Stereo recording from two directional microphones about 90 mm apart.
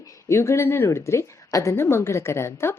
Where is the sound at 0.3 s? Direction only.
30° left (ahead or behind).